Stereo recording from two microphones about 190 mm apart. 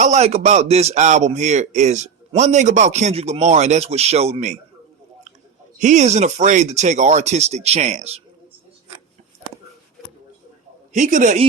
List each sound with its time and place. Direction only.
0.0 s speech: 35° right (ahead or behind)
5.8 s speech: 40° right (ahead or behind)
10.9 s speech: 40° right (ahead or behind)